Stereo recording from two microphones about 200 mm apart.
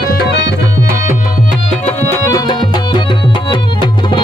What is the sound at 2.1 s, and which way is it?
Music, 20° left (ahead or behind).